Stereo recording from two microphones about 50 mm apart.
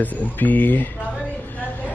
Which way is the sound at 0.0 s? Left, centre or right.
Left.